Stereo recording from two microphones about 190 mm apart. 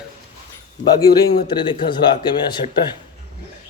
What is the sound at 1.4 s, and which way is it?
Speech, 25° left (ahead or behind).